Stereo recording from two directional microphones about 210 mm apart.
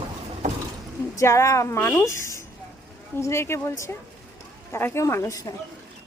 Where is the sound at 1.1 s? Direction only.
15° left (ahead or behind).